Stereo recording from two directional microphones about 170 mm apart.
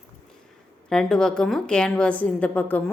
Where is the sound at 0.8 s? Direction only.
5° left (ahead or behind).